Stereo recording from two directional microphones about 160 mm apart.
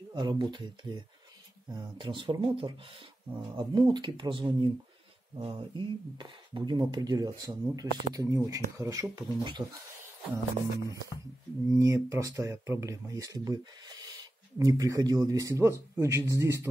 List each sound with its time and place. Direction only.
0.1 s speech: 25° right (ahead or behind)
11.7 s speech: 20° right (ahead or behind)